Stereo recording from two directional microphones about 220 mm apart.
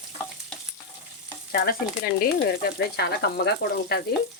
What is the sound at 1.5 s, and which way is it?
Speech, 45° left (ahead or behind).